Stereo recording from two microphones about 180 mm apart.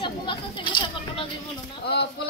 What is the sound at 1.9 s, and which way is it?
Speech, 65° left (ahead or behind).